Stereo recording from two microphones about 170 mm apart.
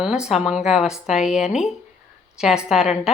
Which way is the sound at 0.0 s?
5° right (ahead or behind).